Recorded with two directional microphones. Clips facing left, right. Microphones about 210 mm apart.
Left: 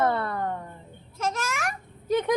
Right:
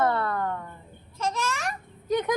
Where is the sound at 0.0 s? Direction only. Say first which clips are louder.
Even; 25° left (ahead or behind).